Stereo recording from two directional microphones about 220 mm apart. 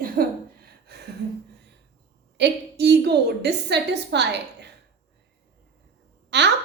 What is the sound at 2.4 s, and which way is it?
A woman's voice, 50° right (ahead or behind).